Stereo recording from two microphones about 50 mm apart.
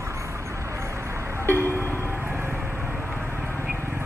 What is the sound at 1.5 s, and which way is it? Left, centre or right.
Music, left.